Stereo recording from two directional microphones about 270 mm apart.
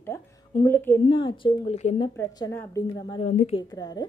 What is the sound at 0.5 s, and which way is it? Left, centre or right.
A woman's voice, centre.